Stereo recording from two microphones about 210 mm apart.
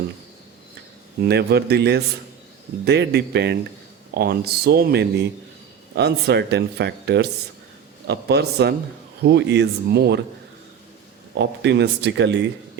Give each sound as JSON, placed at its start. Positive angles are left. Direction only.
{"t": 1.2, "sound": "speech", "side_deg": -50}
{"t": 11.3, "sound": "speech", "side_deg": -55}